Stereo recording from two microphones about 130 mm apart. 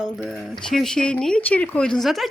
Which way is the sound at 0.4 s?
Centre (ahead or behind).